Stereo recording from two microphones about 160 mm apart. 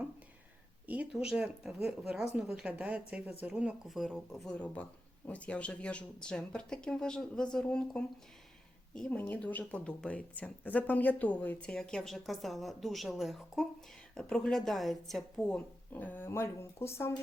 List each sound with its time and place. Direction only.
0.9 s speech: 5° right (ahead or behind); by 17.2 s 15° left (ahead or behind)